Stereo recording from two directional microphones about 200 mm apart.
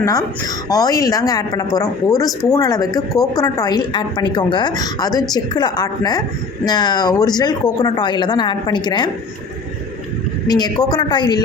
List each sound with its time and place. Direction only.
0.0 s a woman's voice: 15° left (ahead or behind)
10.4 s a woman's voice: 20° left (ahead or behind)